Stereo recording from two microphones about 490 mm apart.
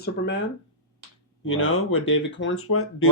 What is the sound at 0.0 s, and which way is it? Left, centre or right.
Speech, left.